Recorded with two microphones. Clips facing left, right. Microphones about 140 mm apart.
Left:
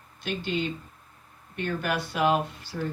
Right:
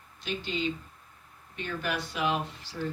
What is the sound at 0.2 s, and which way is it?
Speech, 55° left (ahead or behind).